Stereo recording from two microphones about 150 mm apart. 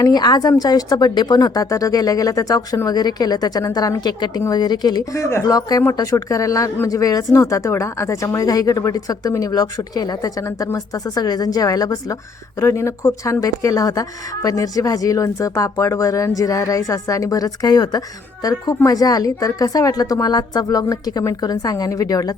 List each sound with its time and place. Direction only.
0.0 s speech: 25° left (ahead or behind)